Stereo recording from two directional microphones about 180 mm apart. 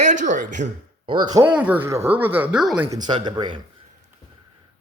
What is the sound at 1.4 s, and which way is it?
Speech, 10° right (ahead or behind).